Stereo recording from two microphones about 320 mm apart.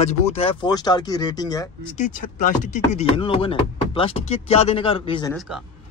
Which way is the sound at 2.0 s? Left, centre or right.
Left.